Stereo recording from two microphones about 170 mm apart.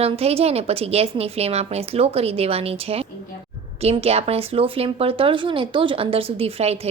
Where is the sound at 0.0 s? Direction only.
35° right (ahead or behind).